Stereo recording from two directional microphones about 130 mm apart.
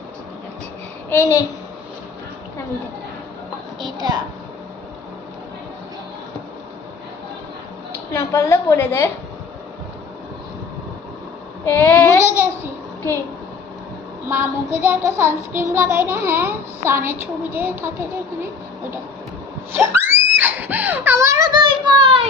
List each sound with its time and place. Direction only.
1.1 s a woman's voice: 25° left (ahead or behind)
3.9 s a woman's voice: 30° right (ahead or behind)
8.1 s a woman's voice: 20° left (ahead or behind)
11.6 s child singing: 15° left (ahead or behind)
14.3 s child singing: 20° right (ahead or behind)
19.7 s screaming: 15° right (ahead or behind); by 22.3 s 45° right (ahead or behind)